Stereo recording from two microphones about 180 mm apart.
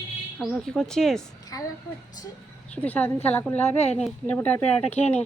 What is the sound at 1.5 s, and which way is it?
Speech, 20° left (ahead or behind).